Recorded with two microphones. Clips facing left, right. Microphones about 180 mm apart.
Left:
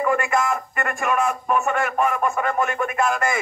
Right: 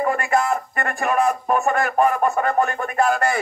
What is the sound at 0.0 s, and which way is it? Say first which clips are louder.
Speech: right 1 dB; 35° right (ahead or behind).